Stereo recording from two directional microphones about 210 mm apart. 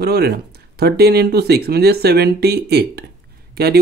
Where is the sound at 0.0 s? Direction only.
50° right (ahead or behind).